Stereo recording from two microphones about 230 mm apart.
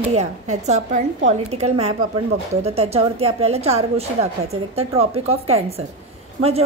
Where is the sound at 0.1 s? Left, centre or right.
Right.